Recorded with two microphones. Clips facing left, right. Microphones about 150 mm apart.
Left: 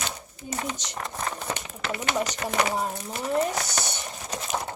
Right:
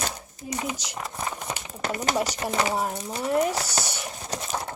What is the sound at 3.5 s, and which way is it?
Speech, 30° right (ahead or behind).